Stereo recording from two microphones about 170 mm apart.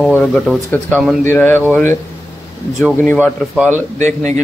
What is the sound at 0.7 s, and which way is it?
A man's voice, 10° left (ahead or behind).